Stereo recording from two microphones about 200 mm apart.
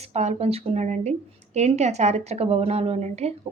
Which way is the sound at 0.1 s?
35° right (ahead or behind).